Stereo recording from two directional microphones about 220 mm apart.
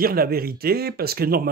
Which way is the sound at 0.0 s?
40° right (ahead or behind).